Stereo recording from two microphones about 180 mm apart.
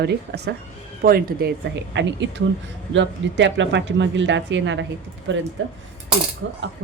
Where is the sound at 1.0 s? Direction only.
55° right (ahead or behind).